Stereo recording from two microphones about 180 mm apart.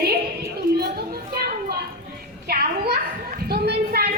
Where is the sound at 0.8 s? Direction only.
60° right (ahead or behind).